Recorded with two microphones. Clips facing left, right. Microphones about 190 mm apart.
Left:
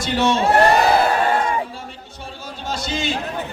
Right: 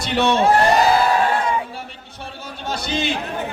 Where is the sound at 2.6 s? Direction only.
60° right (ahead or behind).